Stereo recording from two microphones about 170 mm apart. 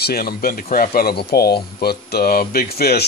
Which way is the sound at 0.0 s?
60° left (ahead or behind).